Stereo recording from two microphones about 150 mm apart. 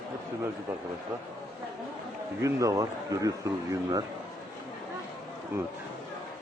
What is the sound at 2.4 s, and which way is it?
A man's voice, 20° right (ahead or behind).